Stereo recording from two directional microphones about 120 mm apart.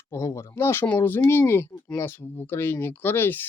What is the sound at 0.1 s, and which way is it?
Speech, 25° left (ahead or behind).